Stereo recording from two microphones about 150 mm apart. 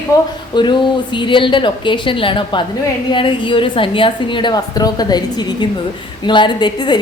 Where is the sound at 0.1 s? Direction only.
20° left (ahead or behind).